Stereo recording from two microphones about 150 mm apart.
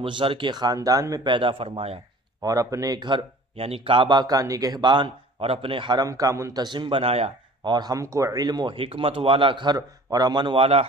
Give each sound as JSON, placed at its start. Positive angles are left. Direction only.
{"t": 0.0, "sound": "a man's voice", "side_deg": -35}
{"t": 2.4, "sound": "a man's voice", "side_deg": -20}